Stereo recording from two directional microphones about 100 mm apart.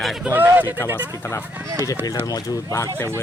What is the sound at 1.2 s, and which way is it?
Speech, 25° left (ahead or behind).